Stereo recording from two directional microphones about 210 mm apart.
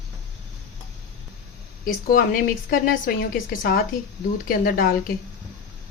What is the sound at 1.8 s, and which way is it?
A woman's voice, 40° left (ahead or behind).